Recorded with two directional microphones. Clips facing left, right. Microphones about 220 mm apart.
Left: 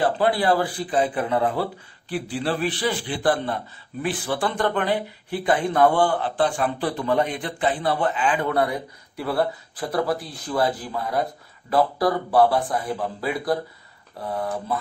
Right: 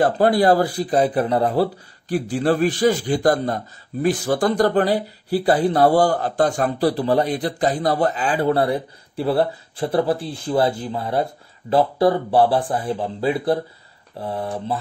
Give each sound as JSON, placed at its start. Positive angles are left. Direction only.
{"t": 0.0, "sound": "speech", "side_deg": -40}